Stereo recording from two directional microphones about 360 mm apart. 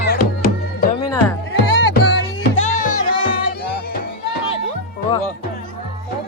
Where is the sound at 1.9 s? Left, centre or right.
Left.